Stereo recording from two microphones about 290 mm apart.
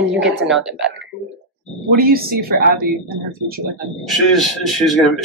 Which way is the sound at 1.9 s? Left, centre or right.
Right.